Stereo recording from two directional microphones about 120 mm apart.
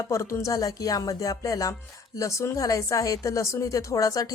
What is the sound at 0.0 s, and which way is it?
A woman's voice, 25° left (ahead or behind).